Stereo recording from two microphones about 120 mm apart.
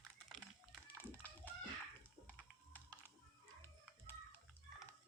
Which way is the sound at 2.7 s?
15° left (ahead or behind).